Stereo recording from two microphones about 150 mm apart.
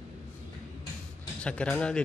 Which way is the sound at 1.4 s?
5° left (ahead or behind).